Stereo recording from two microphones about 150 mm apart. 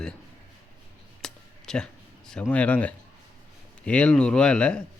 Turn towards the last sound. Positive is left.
turn(degrees=5)  # may be behind; listen again after turning